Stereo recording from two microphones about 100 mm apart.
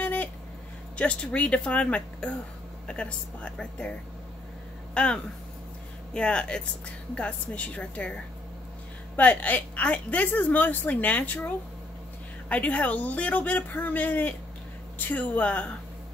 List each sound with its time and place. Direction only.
0.0 s a sound: 15° left (ahead or behind)
0.9 s a woman's voice: 10° left (ahead or behind)
4.9 s a woman's voice: 10° left (ahead or behind)
9.1 s a woman's voice: 15° left (ahead or behind)